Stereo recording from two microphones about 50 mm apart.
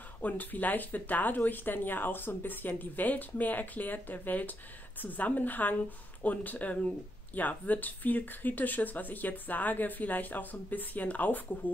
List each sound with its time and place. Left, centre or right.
0.2 s speech: left